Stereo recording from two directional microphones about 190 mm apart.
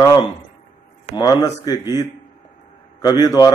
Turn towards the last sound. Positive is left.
turn(degrees=20)  # may be behind; listen again after turning